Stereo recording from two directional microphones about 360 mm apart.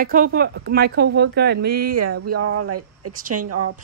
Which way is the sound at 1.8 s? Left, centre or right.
Right.